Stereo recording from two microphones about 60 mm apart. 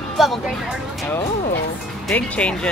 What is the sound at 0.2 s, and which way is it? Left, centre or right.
Music, centre.